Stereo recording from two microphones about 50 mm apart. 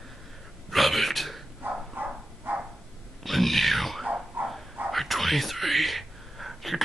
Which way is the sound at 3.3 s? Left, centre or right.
Centre.